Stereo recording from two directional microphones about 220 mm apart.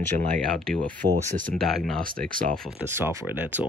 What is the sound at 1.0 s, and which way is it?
Speech, 45° right (ahead or behind).